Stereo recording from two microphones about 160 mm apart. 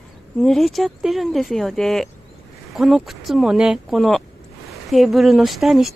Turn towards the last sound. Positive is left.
turn(degrees=0)  # may be behind; listen again after turning